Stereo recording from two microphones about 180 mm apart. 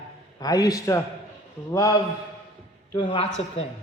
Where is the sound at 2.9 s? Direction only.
30° left (ahead or behind).